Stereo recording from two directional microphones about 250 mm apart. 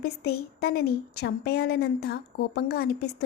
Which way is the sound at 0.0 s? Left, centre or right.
Left.